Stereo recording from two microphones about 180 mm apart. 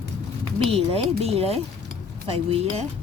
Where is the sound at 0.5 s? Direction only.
35° right (ahead or behind).